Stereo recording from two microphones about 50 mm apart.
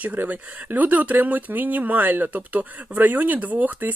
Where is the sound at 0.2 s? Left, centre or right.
Right.